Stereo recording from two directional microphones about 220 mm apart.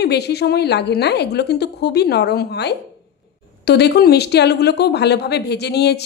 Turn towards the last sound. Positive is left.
turn(degrees=50)  # may be behind; listen again after turning